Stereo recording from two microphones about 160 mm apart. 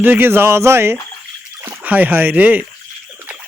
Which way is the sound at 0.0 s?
10° right (ahead or behind).